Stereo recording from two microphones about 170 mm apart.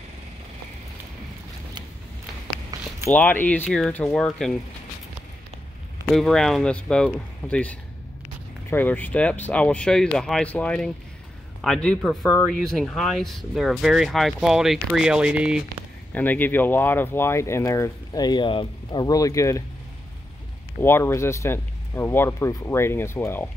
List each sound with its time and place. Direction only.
3.1 s speech: 10° left (ahead or behind)
6.1 s speech: centre (ahead or behind)
16.1 s speech: 10° left (ahead or behind)
20.8 s speech: 15° left (ahead or behind)